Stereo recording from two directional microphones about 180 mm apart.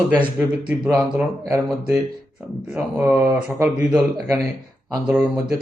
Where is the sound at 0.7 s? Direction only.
5° right (ahead or behind).